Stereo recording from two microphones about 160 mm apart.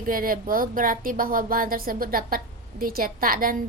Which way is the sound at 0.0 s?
60° right (ahead or behind).